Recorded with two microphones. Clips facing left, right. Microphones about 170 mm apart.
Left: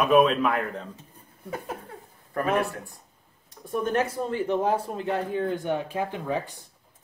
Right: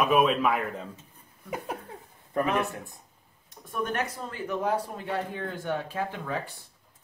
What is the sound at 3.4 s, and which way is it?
Speech, 30° left (ahead or behind).